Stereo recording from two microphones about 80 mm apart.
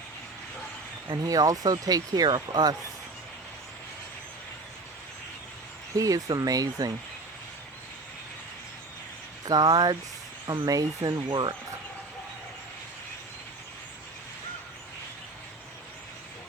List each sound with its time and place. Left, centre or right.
1.0 s speech: right
6.0 s speech: right
9.5 s speech: right
11.3 s speech: right